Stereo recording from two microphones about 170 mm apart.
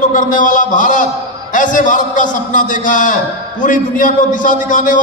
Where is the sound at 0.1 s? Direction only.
50° left (ahead or behind).